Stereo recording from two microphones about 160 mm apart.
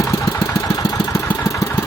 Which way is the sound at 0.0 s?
20° left (ahead or behind).